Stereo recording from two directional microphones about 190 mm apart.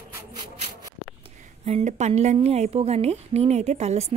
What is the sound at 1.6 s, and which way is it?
Speech, 35° right (ahead or behind).